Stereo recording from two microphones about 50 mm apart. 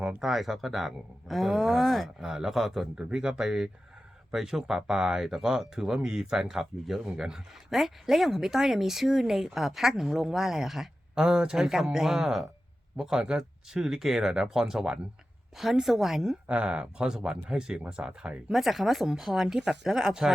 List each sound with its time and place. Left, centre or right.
0.2 s speech: centre
3.0 s speech: centre
11.1 s speech: centre
16.5 s speech: right
18.5 s speech: centre